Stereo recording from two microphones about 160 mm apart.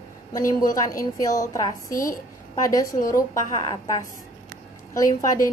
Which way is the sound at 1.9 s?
60° left (ahead or behind).